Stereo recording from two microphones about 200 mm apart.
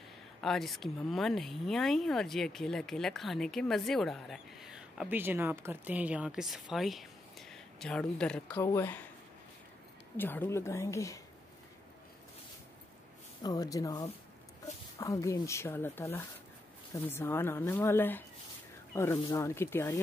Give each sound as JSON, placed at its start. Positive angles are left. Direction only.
{"t": 0.4, "sound": "speech", "side_deg": 0}
{"t": 8.5, "sound": "speech", "side_deg": 15}
{"t": 10.1, "sound": "speech", "side_deg": 10}
{"t": 13.4, "sound": "speech", "side_deg": 20}